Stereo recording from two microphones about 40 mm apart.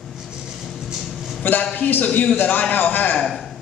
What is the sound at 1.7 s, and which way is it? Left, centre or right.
A man's voice, left.